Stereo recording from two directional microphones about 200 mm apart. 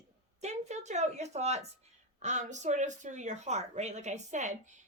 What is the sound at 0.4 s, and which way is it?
A woman's voice, 35° right (ahead or behind).